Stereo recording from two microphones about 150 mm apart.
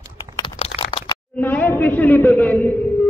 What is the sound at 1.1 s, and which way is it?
A man's voice, 15° left (ahead or behind).